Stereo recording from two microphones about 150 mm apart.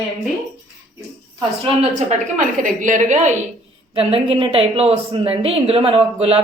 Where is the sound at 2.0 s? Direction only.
55° right (ahead or behind).